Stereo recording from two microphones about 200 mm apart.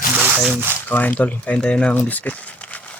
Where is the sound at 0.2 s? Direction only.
5° right (ahead or behind).